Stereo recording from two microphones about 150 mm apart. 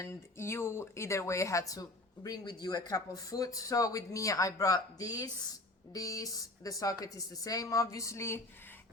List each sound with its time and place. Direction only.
0.0 s speech: 15° left (ahead or behind)